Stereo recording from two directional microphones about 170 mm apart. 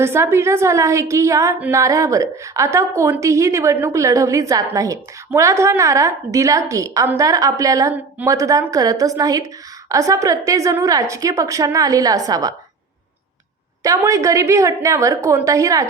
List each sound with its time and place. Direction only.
0.0 s a woman's voice: 15° right (ahead or behind)
13.8 s a woman's voice: 20° right (ahead or behind)